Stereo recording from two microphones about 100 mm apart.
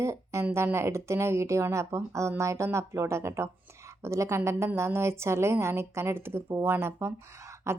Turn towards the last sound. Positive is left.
turn(degrees=-25)  # may be behind; listen again after turning